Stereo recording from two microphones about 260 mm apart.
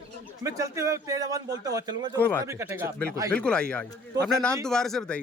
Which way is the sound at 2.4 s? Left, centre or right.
Centre.